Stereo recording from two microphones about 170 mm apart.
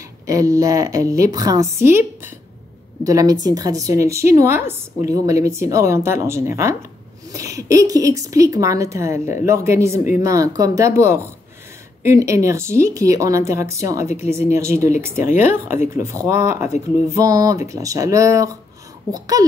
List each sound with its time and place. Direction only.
0.3 s a woman's voice: 20° right (ahead or behind)